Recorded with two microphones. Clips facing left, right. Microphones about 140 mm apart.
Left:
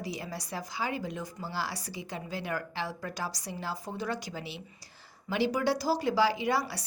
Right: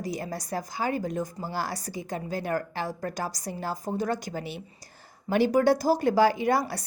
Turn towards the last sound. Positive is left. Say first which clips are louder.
# right 5 dB
turn(degrees=-50)  # may be behind; listen again after turning